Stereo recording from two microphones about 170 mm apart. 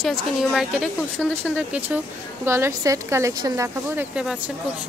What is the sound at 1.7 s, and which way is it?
Speech, 10° right (ahead or behind).